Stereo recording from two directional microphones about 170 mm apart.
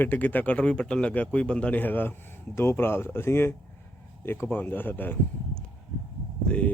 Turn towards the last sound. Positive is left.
turn(degrees=5)  # may be behind; listen again after turning